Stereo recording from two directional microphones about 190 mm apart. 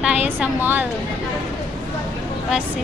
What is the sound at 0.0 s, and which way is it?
Speech, 10° right (ahead or behind).